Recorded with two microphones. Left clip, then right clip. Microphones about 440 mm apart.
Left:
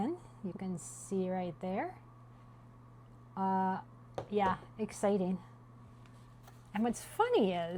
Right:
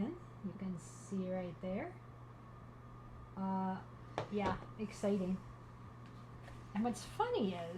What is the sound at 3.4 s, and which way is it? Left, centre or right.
A woman's voice, left.